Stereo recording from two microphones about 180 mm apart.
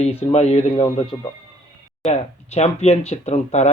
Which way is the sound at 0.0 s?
35° left (ahead or behind).